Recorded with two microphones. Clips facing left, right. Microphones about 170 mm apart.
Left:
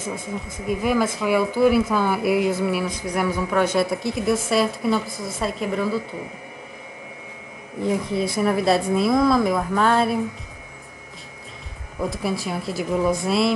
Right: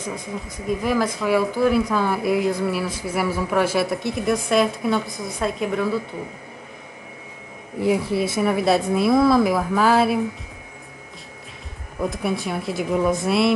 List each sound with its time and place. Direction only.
0.7 s speech: centre (ahead or behind)
7.8 s speech: 5° right (ahead or behind)
12.1 s speech: centre (ahead or behind)